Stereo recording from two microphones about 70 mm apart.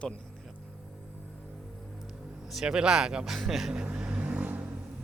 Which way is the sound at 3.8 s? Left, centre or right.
Centre.